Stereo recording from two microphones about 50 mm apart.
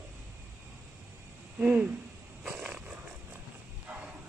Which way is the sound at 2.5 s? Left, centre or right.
Centre.